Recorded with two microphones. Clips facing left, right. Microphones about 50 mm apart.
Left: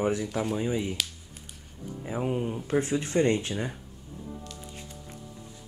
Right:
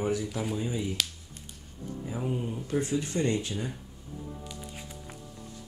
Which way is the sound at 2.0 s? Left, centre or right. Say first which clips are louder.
Left 4 dB; left.